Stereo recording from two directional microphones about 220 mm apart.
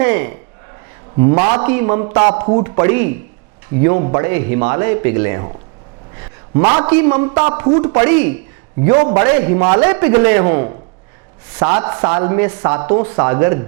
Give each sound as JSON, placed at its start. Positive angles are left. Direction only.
{"t": 0.0, "sound": "speech", "side_deg": -10}
{"t": 1.1, "sound": "a man's voice", "side_deg": -20}
{"t": 1.5, "sound": "speech", "side_deg": -10}
{"t": 2.1, "sound": "a man's voice", "side_deg": -25}
{"t": 6.1, "sound": "a sound", "side_deg": -20}
{"t": 6.8, "sound": "speech", "side_deg": -10}
{"t": 8.0, "sound": "speech", "side_deg": -10}
{"t": 8.8, "sound": "a man's voice", "side_deg": -20}
{"t": 9.3, "sound": "speech", "side_deg": -10}
{"t": 11.8, "sound": "speech", "side_deg": -10}